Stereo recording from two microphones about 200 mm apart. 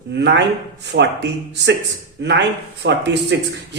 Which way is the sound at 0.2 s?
60° right (ahead or behind).